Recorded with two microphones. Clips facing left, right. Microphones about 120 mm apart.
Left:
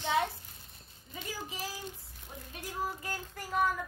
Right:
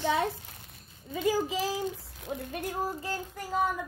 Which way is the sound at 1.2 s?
90° right.